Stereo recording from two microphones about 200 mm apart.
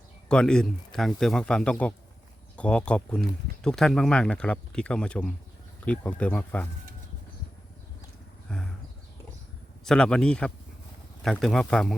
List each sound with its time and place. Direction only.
0.3 s speech: 5° left (ahead or behind)
8.4 s a sound: 5° left (ahead or behind)
9.8 s speech: 5° left (ahead or behind)